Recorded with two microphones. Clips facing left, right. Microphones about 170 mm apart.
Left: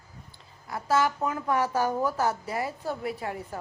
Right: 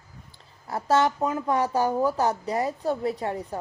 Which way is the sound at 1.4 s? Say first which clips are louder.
Right 1 dB; 15° right (ahead or behind).